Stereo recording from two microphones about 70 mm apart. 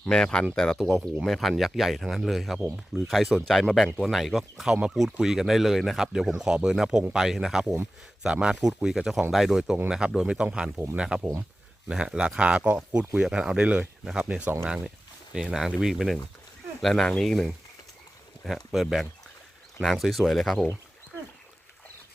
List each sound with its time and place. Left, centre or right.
0.0 s speech: centre
16.8 s speech: centre